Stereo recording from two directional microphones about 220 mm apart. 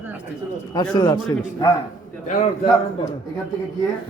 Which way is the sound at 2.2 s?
35° left (ahead or behind).